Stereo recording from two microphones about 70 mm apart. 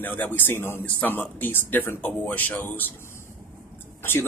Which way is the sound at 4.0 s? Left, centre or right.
Left.